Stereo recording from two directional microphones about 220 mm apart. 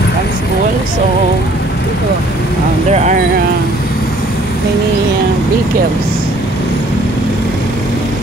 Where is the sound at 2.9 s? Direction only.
30° right (ahead or behind).